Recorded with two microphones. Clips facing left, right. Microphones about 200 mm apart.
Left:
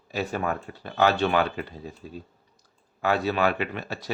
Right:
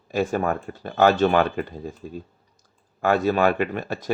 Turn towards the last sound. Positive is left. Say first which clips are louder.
# right 5 dB
turn(degrees=-50)  # may be behind; listen again after turning